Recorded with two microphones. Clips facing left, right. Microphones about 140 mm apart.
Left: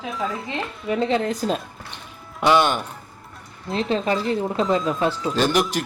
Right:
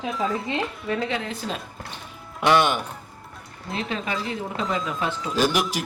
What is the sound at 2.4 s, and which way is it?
Speech, centre (ahead or behind).